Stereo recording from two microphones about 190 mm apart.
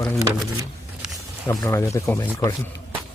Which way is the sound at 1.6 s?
15° left (ahead or behind).